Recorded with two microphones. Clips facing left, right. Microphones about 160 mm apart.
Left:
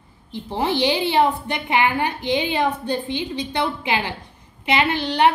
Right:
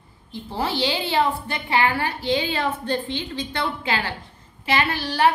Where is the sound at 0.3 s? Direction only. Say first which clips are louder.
Left 4 dB; 20° left (ahead or behind).